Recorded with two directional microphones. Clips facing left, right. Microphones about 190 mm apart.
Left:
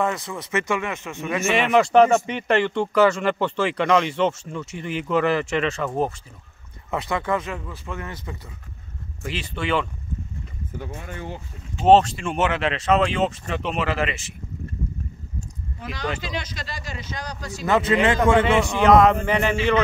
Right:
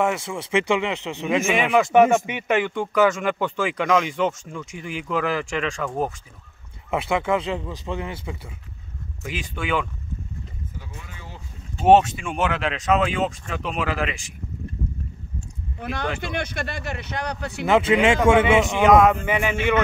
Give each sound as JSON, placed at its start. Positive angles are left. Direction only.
{"t": 0.3, "sound": "speech", "side_deg": -10}
{"t": 1.5, "sound": "speech", "side_deg": 0}
{"t": 6.9, "sound": "speech", "side_deg": -10}
{"t": 9.2, "sound": "speech", "side_deg": -5}
{"t": 10.8, "sound": "speech", "side_deg": 55}
{"t": 11.9, "sound": "speech", "side_deg": 0}
{"t": 15.8, "sound": "speech", "side_deg": -55}
{"t": 17.6, "sound": "speech", "side_deg": -10}